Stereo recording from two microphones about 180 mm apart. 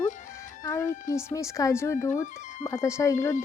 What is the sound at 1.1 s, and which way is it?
Speech, 15° left (ahead or behind).